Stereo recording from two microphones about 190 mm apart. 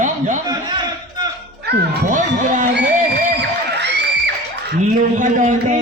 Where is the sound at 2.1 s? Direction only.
40° right (ahead or behind).